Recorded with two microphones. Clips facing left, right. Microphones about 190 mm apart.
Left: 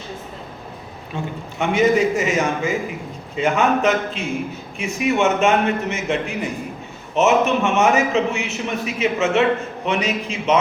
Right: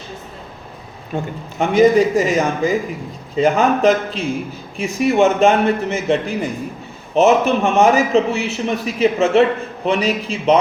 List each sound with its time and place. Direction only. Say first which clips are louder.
1.1 s a man's voice: right 4 dB; 35° right (ahead or behind)